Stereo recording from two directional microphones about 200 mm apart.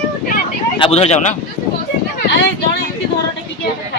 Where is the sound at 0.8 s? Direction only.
30° left (ahead or behind).